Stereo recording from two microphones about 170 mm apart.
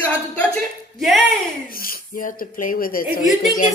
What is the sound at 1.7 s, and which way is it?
A woman's voice, 60° left (ahead or behind).